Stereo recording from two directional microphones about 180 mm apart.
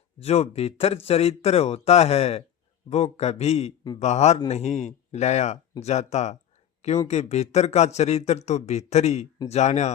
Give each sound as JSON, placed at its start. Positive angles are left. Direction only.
{"t": 0.2, "sound": "speech", "side_deg": 35}